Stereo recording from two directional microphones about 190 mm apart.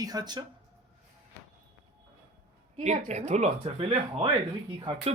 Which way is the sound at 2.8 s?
35° right (ahead or behind).